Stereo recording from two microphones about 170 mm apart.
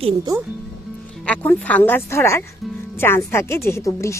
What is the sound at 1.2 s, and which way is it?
Speech, 10° left (ahead or behind).